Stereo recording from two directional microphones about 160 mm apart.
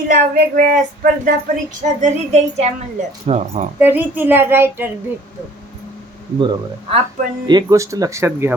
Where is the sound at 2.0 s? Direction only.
45° right (ahead or behind).